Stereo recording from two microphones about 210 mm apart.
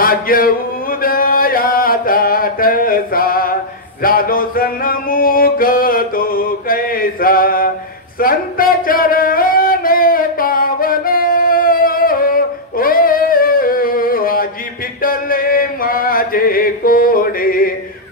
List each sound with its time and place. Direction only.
0.0 s chant: 45° left (ahead or behind)
4.0 s music: 45° left (ahead or behind)
8.2 s a sound: 45° left (ahead or behind)
15.0 s chant: 45° left (ahead or behind)